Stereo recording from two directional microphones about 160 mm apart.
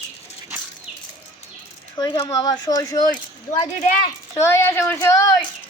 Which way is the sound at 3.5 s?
50° left (ahead or behind).